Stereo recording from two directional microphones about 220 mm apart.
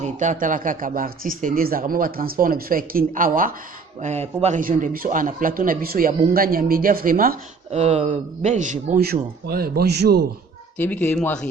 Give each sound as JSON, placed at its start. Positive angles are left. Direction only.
{"t": 0.0, "sound": "a man's voice", "side_deg": -35}
{"t": 10.8, "sound": "speech", "side_deg": 5}